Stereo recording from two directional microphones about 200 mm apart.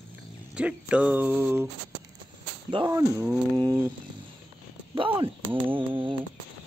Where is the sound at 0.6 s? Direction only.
5° right (ahead or behind).